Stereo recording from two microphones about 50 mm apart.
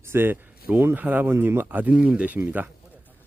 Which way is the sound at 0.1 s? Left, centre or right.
Right.